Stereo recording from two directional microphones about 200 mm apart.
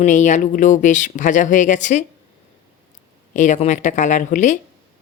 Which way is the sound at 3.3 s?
35° left (ahead or behind).